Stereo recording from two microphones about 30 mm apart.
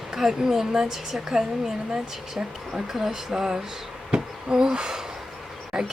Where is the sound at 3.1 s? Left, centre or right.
Right.